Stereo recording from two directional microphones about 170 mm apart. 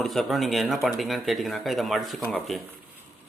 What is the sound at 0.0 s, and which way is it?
Speech, centre (ahead or behind).